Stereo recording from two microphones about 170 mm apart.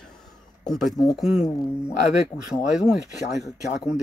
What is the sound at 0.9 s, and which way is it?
Speech, 20° left (ahead or behind).